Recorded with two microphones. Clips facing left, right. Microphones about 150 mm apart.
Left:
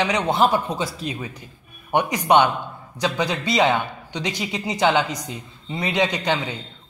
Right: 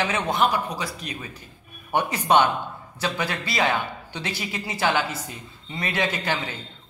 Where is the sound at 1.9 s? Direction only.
15° left (ahead or behind).